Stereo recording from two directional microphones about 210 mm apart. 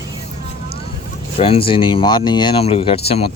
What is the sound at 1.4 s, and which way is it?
Speech, 25° left (ahead or behind).